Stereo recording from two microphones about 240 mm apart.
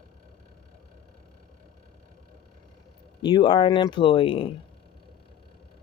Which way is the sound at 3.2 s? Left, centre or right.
Centre.